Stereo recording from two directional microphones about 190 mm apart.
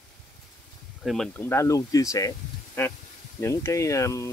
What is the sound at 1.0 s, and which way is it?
Speech, centre (ahead or behind).